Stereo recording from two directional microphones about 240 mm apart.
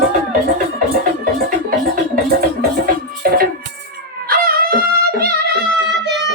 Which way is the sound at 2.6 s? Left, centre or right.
Right.